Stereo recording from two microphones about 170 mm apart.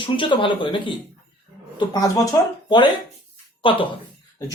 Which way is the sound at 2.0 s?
20° left (ahead or behind).